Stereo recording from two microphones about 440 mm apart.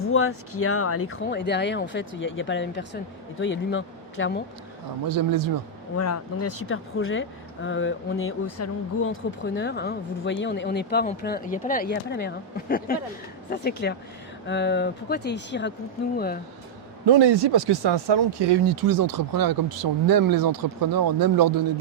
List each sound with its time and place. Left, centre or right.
0.0 s a woman's voice: left
5.0 s speech: right
6.0 s a woman's voice: left
17.1 s speech: right